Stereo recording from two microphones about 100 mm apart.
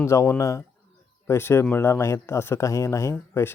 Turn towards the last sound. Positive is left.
turn(degrees=20)  # may be behind; listen again after turning